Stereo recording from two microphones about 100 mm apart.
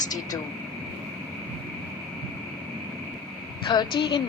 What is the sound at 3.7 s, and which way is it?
Speech, 45° left (ahead or behind).